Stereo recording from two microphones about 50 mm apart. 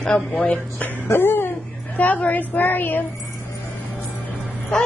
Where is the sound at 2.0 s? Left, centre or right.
Left.